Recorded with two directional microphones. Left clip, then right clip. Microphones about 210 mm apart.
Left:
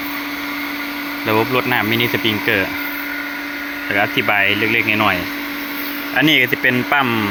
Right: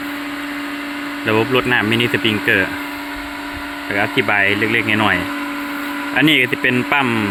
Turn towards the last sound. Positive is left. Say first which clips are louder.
# even
turn(degrees=-15)  # may be behind; listen again after turning